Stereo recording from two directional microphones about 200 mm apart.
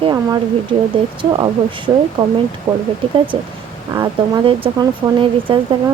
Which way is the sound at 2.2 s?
20° right (ahead or behind).